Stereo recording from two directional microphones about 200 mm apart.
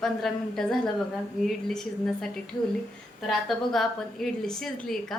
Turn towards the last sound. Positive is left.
turn(degrees=0)  # may be behind; listen again after turning